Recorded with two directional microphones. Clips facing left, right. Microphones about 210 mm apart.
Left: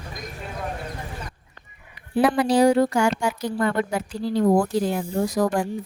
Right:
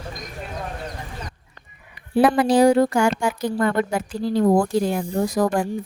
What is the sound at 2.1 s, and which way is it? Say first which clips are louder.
A woman's voice: right 3 dB; 50° right (ahead or behind).